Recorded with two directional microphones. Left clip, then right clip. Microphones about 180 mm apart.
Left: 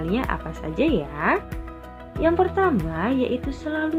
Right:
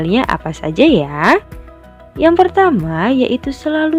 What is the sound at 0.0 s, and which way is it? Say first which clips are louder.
A woman's voice: right 10 dB; 60° right (ahead or behind).